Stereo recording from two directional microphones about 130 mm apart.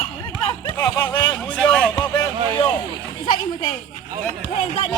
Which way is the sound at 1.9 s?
35° left (ahead or behind).